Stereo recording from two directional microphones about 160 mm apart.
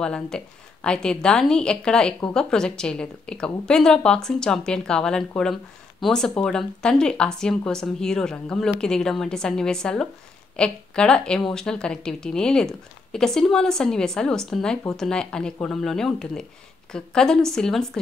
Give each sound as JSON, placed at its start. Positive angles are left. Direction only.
{"t": 0.0, "sound": "a woman's voice", "side_deg": 5}